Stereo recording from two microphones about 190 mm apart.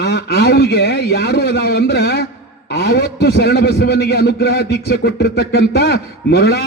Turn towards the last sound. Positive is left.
turn(degrees=55)  # may be behind; listen again after turning